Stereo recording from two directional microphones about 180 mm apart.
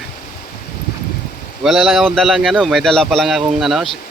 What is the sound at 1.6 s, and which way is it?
A man's voice, centre (ahead or behind).